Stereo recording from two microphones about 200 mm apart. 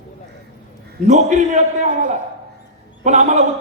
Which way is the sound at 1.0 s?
35° right (ahead or behind).